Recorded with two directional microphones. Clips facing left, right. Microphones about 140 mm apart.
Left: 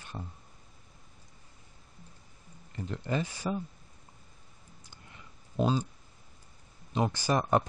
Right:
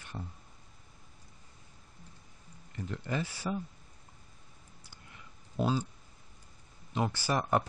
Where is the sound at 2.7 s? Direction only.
25° left (ahead or behind).